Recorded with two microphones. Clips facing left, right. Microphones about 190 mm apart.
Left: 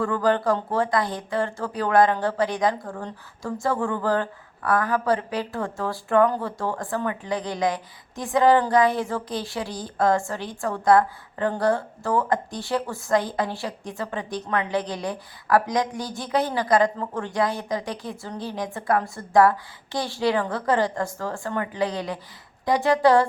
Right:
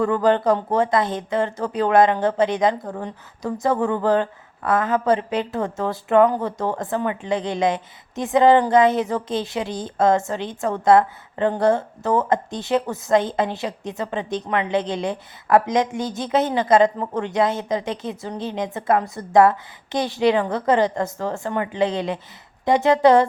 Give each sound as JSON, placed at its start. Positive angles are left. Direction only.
{"t": 0.0, "sound": "speech", "side_deg": -20}